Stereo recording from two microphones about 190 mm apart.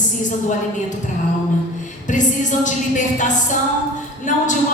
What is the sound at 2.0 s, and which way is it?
A woman's voice, 40° left (ahead or behind).